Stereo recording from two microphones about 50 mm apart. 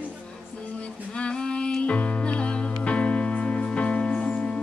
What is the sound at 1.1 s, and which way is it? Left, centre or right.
Music, centre.